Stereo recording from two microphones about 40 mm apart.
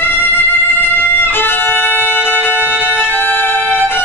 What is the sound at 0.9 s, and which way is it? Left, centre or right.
Violin, left.